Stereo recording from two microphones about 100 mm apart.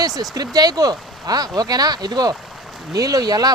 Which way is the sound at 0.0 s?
40° right (ahead or behind).